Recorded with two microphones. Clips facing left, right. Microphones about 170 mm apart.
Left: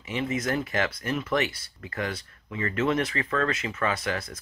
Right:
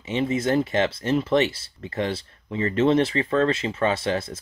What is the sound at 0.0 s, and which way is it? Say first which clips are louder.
Speech: right 5 dB; 25° right (ahead or behind).